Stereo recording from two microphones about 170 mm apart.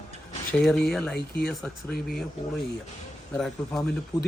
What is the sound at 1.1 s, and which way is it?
Speech, 65° left (ahead or behind).